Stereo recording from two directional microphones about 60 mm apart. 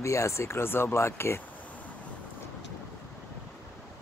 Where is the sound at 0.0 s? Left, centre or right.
Left.